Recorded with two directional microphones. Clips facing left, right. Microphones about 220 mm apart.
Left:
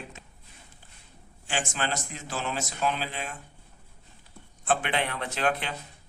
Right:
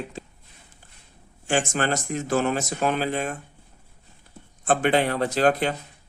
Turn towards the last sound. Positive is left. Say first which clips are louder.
# right 8 dB
turn(degrees=-40)  # may be behind; listen again after turning